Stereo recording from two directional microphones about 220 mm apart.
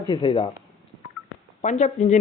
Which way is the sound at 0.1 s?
20° left (ahead or behind).